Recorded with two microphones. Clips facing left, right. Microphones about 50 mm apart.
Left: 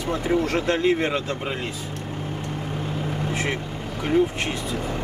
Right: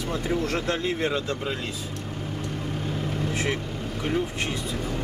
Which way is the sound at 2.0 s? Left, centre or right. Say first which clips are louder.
Left 2 dB; left.